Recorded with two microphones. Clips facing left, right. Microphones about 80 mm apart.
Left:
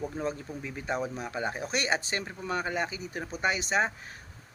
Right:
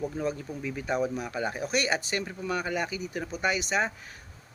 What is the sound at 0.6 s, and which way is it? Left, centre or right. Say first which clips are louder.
Speech: right 4 dB; left.